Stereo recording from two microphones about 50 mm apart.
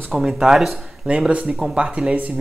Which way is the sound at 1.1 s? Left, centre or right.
Right.